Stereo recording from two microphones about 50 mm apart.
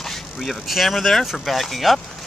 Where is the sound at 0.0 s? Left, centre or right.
Centre.